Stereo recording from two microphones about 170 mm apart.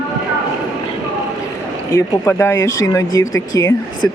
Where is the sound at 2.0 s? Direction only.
15° left (ahead or behind).